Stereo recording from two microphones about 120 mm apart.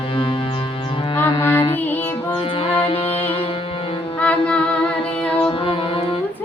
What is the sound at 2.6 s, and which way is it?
Music, 50° left (ahead or behind).